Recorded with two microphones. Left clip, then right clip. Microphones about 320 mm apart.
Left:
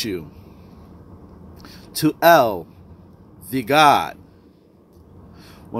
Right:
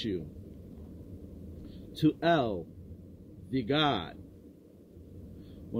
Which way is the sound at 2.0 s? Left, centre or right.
Centre.